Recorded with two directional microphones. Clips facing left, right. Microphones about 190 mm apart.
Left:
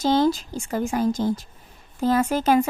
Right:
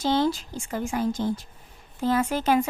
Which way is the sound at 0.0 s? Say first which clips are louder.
Left 4 dB; 40° left (ahead or behind).